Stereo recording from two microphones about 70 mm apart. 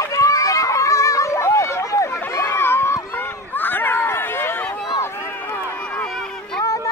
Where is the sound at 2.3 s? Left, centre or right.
Left.